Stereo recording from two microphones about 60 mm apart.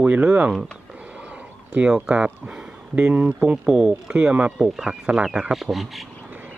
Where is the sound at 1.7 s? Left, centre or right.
Centre.